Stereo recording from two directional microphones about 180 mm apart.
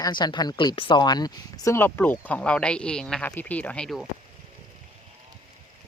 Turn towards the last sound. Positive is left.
turn(degrees=0)  # may be behind; listen again after turning